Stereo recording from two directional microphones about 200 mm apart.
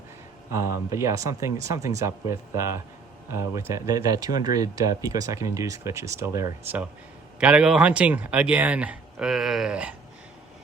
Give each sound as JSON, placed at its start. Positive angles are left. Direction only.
{"t": 0.5, "sound": "speech", "side_deg": -15}